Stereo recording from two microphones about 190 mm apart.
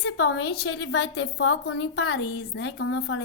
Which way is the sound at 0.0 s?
70° left (ahead or behind).